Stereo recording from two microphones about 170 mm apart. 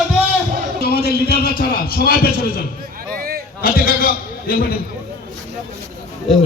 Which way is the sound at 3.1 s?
60° right (ahead or behind).